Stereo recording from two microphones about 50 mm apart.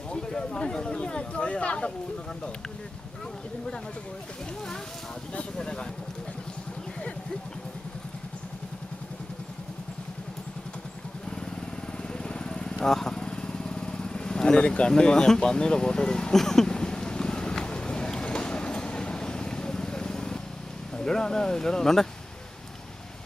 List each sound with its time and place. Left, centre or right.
0.1 s a sound: centre
5.3 s speech: centre
12.1 s vehicle: centre
21.0 s speech: centre